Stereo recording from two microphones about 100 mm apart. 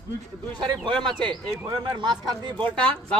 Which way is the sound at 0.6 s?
50° right (ahead or behind).